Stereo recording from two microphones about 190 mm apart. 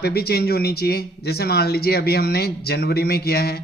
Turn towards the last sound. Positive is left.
turn(degrees=55)  # may be behind; listen again after turning